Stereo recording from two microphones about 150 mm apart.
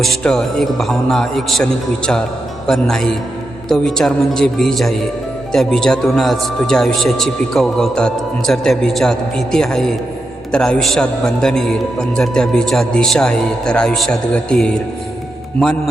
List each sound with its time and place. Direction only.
0.0 s a man's voice: 5° left (ahead or behind)